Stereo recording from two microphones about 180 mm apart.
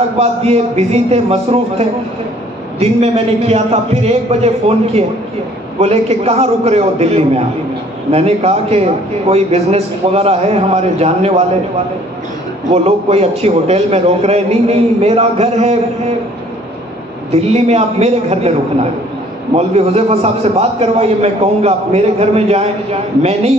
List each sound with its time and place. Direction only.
0.2 s a man's voice: 35° right (ahead or behind)
12.8 s a man's voice: 35° right (ahead or behind)
17.3 s a man's voice: 35° right (ahead or behind)
19.5 s a man's voice: 35° right (ahead or behind)